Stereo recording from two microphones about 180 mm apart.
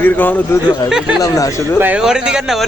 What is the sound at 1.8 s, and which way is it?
Speech, 10° right (ahead or behind).